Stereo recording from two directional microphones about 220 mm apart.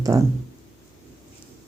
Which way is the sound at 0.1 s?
15° right (ahead or behind).